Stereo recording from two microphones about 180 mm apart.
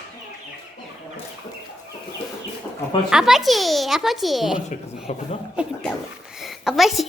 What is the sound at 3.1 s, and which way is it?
A woman's voice, 5° right (ahead or behind).